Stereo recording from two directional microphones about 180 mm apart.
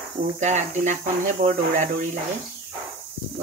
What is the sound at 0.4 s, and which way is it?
Speech, 40° right (ahead or behind).